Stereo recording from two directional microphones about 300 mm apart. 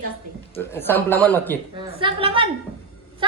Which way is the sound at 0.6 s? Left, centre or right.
Centre.